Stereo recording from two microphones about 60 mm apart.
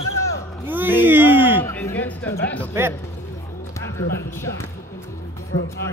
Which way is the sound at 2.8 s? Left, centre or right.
Right.